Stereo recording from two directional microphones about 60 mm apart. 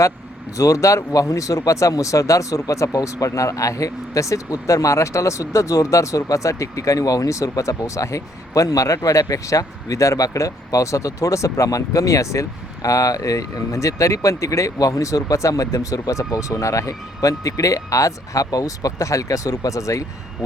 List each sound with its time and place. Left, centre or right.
0.5 s speech: left